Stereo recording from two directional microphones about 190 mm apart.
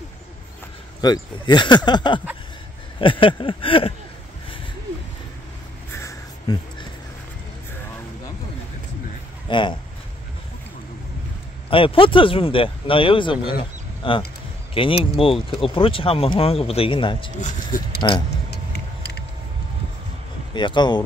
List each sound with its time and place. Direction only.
1.0 s speech: 20° left (ahead or behind)
5.9 s a sound: 20° left (ahead or behind)
9.5 s speech: 25° left (ahead or behind)
11.7 s speech: 30° left (ahead or behind)
17.4 s speech: 45° left (ahead or behind)
20.5 s speech: 25° left (ahead or behind)